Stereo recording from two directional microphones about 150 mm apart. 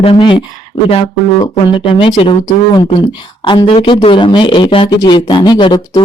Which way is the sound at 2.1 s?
25° left (ahead or behind).